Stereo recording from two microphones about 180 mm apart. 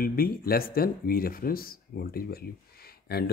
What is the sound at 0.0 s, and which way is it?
Speech, 55° left (ahead or behind).